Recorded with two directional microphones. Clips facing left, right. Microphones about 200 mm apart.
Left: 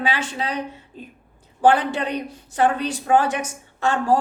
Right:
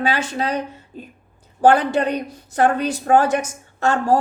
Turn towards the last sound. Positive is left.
turn(degrees=-40)  # may be behind; listen again after turning